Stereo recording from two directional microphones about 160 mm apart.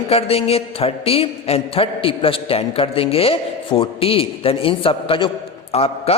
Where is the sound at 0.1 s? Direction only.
40° left (ahead or behind).